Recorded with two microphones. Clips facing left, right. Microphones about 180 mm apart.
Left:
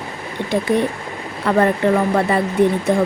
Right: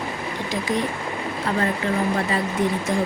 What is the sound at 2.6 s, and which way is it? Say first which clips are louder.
Speech: left 9 dB; 60° left (ahead or behind).